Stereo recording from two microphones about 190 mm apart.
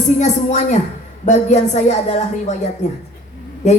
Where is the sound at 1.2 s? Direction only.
35° left (ahead or behind).